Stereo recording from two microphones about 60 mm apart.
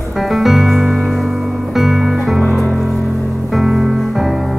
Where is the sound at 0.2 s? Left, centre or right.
Centre.